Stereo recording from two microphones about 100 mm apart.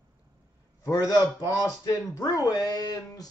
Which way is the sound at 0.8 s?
35° left (ahead or behind).